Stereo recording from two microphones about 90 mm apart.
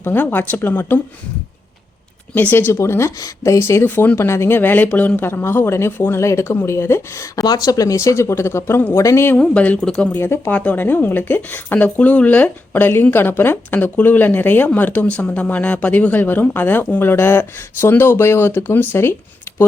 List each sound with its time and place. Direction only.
0.0 s speech: 25° left (ahead or behind)
2.3 s speech: 20° left (ahead or behind)
7.4 s speech: 45° left (ahead or behind); by 9.4 s 25° left (ahead or behind)
9.4 s speech: 10° left (ahead or behind)
10.1 s speech: 25° left (ahead or behind)
19.5 s a sound: 30° left (ahead or behind)